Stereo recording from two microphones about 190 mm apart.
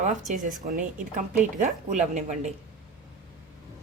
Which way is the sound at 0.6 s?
45° right (ahead or behind).